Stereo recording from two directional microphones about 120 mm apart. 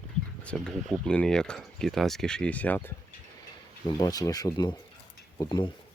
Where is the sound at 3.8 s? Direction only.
30° left (ahead or behind).